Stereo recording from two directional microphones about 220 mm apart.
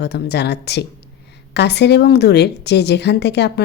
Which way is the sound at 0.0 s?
50° left (ahead or behind).